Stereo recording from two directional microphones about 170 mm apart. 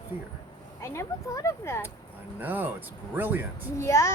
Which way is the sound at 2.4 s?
10° right (ahead or behind).